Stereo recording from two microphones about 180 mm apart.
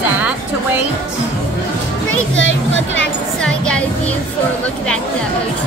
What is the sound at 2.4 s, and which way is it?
Speech, 90° left.